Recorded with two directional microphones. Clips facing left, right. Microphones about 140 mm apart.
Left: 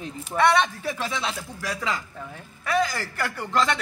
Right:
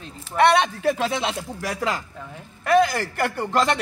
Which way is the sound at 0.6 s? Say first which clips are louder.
Right 7 dB; 70° right (ahead or behind).